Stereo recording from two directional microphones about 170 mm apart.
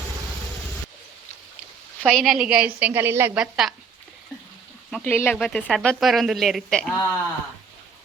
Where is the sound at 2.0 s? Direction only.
Centre (ahead or behind).